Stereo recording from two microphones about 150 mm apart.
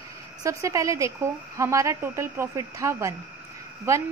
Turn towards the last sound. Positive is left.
turn(degrees=-20)  # may be behind; listen again after turning